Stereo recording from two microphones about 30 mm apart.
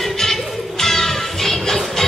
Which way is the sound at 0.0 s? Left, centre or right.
Centre.